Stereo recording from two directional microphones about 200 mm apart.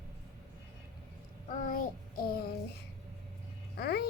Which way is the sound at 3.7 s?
50° left (ahead or behind).